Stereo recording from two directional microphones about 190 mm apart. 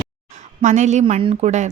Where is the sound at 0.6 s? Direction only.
40° right (ahead or behind).